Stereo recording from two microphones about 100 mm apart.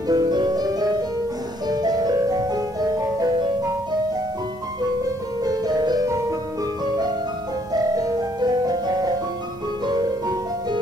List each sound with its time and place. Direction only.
0.1 s music: 45° right (ahead or behind)
5.4 s music: 40° right (ahead or behind)
7.7 s music: 40° right (ahead or behind)